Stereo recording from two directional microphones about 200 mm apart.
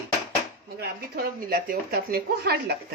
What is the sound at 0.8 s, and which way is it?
Speech, 50° right (ahead or behind).